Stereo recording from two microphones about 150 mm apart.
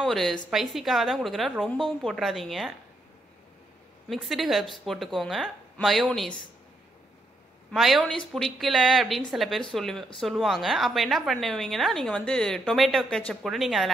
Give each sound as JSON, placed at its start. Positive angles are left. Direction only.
{"t": 0.0, "sound": "a woman's voice", "side_deg": 0}
{"t": 4.1, "sound": "a woman's voice", "side_deg": 0}
{"t": 7.7, "sound": "a woman's voice", "side_deg": 0}